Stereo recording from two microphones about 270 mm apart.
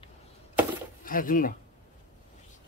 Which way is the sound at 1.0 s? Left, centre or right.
Left.